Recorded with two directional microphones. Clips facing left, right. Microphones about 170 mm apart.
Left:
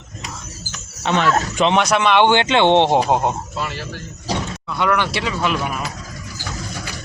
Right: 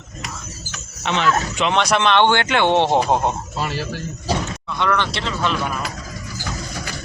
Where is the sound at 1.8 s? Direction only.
5° left (ahead or behind).